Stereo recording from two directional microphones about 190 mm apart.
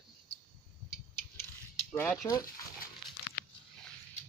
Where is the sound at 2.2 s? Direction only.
20° left (ahead or behind).